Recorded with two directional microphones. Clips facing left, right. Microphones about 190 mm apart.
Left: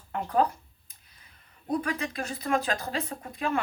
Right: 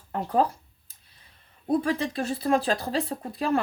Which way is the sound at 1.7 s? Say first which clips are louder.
Right 5 dB; 30° right (ahead or behind).